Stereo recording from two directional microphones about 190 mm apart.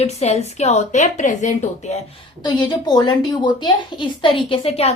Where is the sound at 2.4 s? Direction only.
20° left (ahead or behind).